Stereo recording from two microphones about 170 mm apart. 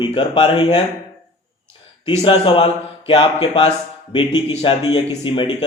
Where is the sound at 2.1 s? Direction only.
30° left (ahead or behind).